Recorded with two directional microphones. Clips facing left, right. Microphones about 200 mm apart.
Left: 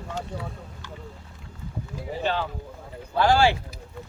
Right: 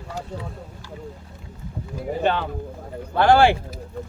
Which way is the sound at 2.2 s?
55° right (ahead or behind).